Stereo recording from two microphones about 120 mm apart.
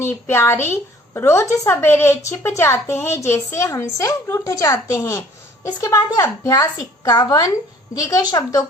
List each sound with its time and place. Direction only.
0.0 s a woman's voice: 20° left (ahead or behind)